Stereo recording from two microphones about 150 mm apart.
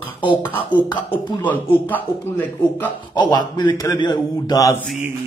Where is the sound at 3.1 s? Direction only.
30° left (ahead or behind).